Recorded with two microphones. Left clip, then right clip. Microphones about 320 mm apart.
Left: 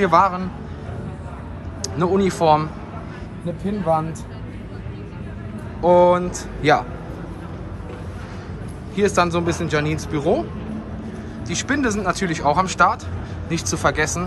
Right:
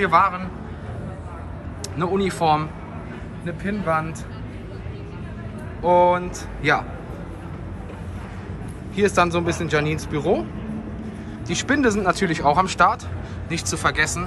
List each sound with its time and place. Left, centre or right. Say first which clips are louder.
0.0 s speech: left 2 dB; centre
2.0 s speech: left 3 dB; centre
5.8 s speech: left 2 dB; centre
8.9 s speech: even; centre
11.4 s speech: right 2 dB; centre